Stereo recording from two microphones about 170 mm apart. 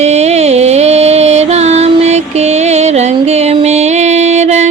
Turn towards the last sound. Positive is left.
turn(degrees=-40)  # may be behind; listen again after turning